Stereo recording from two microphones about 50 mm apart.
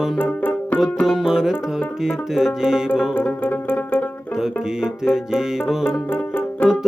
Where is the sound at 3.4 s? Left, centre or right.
Left.